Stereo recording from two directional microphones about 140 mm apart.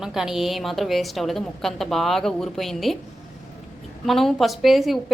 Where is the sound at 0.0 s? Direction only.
5° right (ahead or behind).